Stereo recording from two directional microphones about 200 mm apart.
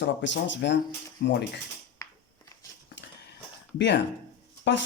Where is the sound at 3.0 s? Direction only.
60° left (ahead or behind).